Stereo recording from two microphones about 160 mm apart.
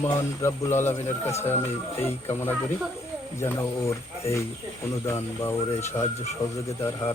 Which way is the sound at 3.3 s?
15° left (ahead or behind).